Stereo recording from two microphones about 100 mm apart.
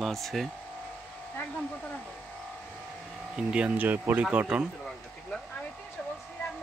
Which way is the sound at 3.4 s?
10° right (ahead or behind).